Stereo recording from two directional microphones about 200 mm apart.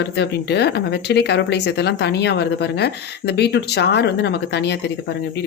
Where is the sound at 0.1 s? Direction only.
55° left (ahead or behind).